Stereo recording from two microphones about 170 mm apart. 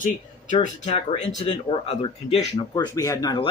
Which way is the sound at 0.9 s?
40° left (ahead or behind).